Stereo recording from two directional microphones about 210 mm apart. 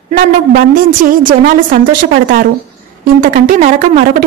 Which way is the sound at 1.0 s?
40° right (ahead or behind).